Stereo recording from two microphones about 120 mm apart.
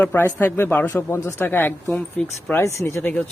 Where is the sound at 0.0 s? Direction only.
20° left (ahead or behind).